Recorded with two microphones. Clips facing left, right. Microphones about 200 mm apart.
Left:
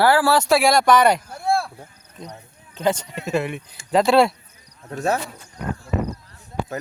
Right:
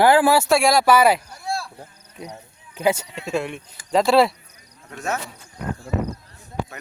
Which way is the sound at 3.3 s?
Centre (ahead or behind).